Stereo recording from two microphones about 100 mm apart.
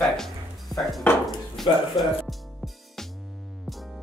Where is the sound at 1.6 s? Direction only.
Centre (ahead or behind).